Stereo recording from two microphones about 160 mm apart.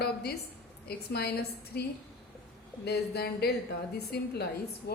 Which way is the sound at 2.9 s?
85° left.